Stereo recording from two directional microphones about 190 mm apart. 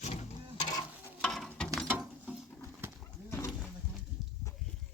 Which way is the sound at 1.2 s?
5° left (ahead or behind).